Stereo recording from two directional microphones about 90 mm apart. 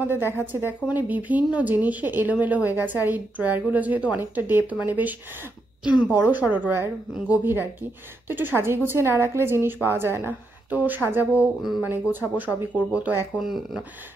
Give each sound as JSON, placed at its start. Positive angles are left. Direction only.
{"t": 0.0, "sound": "speech", "side_deg": -20}
{"t": 13.4, "sound": "speech", "side_deg": -5}